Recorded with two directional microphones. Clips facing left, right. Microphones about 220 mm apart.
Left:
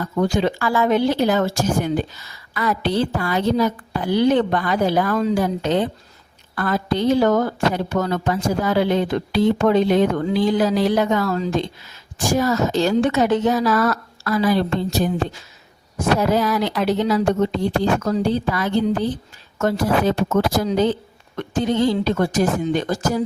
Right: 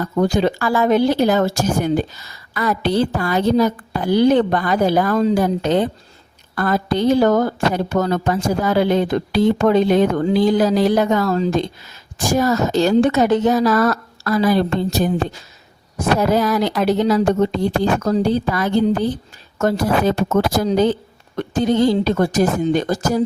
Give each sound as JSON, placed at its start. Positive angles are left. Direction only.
{"t": 0.2, "sound": "a woman's voice", "side_deg": -40}